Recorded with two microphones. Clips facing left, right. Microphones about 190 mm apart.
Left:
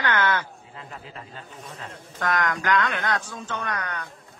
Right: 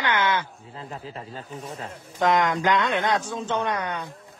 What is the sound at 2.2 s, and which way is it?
Speech, 20° right (ahead or behind).